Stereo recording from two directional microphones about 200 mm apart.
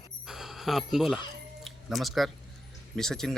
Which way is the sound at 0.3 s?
Centre (ahead or behind).